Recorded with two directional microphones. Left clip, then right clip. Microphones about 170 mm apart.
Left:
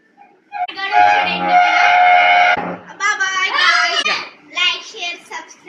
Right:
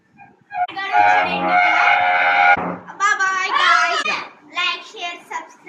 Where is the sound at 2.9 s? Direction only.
40° right (ahead or behind).